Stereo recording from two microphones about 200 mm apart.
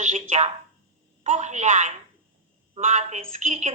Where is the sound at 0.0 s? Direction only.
35° right (ahead or behind).